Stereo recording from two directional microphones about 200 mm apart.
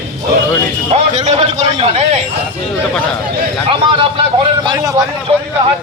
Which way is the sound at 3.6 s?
25° right (ahead or behind).